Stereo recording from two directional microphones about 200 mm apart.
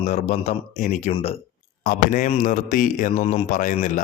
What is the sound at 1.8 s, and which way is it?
A man's voice, 45° left (ahead or behind).